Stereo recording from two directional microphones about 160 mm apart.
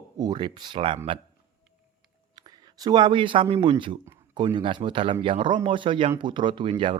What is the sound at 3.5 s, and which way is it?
Speech, 30° right (ahead or behind).